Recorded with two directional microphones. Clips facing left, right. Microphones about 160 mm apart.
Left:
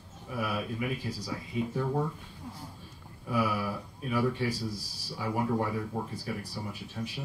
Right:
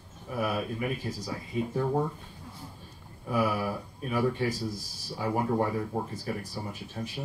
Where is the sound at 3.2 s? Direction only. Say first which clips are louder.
Right 2 dB; 45° right (ahead or behind).